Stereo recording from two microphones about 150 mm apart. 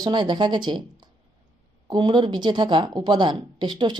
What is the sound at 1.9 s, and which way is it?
Speech, 30° right (ahead or behind).